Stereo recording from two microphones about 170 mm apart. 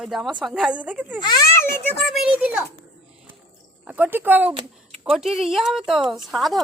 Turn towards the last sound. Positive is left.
turn(degrees=0)  # may be behind; listen again after turning